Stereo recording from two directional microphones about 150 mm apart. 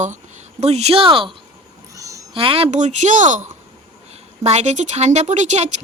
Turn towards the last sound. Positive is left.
turn(degrees=-50)  # may be behind; listen again after turning